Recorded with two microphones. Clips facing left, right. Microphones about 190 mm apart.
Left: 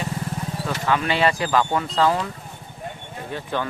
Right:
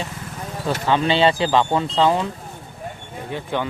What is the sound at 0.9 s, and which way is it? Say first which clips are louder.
Speech: right 3 dB; 25° right (ahead or behind).